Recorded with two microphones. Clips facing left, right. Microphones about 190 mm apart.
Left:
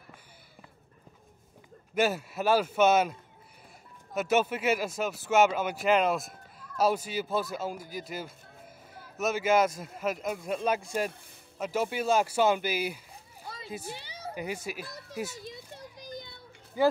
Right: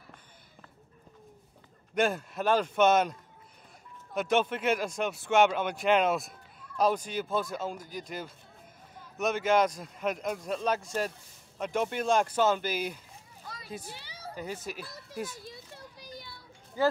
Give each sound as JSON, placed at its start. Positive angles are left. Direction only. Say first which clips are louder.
{"t": 2.0, "sound": "speech", "louder": "left 1 dB", "side_deg": 5}
{"t": 13.9, "sound": "a child's voice", "louder": "left 3 dB", "side_deg": 20}
{"t": 15.4, "sound": "children playing", "louder": "left 3 dB", "side_deg": 20}